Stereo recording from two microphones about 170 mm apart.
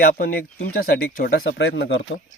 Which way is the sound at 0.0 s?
60° left (ahead or behind).